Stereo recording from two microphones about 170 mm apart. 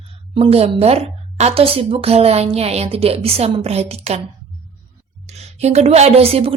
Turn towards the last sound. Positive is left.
turn(degrees=-35)  # may be behind; listen again after turning